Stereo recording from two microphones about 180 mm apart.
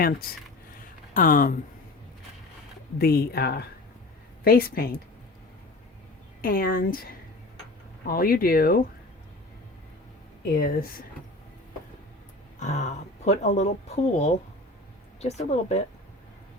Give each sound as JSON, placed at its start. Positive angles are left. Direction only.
{"t": 1.1, "sound": "speech", "side_deg": 50}
{"t": 3.0, "sound": "speech", "side_deg": 60}
{"t": 6.4, "sound": "speech", "side_deg": 55}
{"t": 10.4, "sound": "speech", "side_deg": 55}
{"t": 12.5, "sound": "speech", "side_deg": 40}